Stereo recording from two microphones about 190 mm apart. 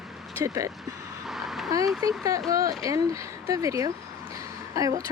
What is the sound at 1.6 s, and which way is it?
A woman's voice, 20° right (ahead or behind).